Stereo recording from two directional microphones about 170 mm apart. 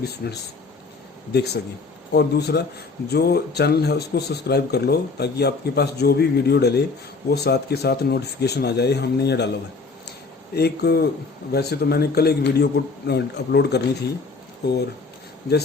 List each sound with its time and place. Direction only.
0.0 s speech: 70° left (ahead or behind)
10.1 s a sound: 70° left (ahead or behind)
11.5 s speech: 70° left (ahead or behind)